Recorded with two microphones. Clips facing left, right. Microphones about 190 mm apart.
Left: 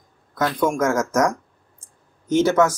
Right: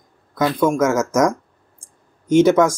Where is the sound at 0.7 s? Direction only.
5° right (ahead or behind).